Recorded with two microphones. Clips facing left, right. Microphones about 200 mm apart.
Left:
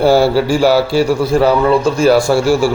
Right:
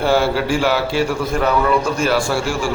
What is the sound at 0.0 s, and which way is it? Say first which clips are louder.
A man's voice: left 6 dB; 35° left (ahead or behind).